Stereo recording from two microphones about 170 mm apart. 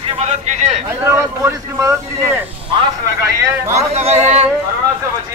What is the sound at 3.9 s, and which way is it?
Speech, 40° right (ahead or behind).